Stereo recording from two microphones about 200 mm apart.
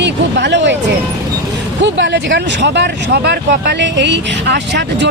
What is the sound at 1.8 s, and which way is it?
Speech, 65° right (ahead or behind).